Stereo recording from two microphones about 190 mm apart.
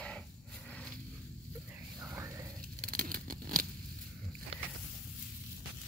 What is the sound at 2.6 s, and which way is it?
Tearing, 45° right (ahead or behind).